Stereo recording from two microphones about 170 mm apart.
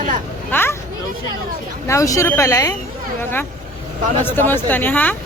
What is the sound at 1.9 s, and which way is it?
Speech, 20° left (ahead or behind).